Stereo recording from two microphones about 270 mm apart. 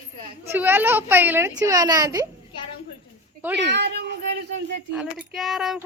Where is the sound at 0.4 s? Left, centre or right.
Centre.